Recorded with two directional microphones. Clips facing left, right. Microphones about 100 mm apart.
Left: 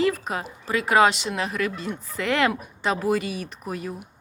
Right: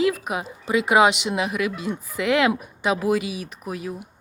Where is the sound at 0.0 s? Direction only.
10° right (ahead or behind).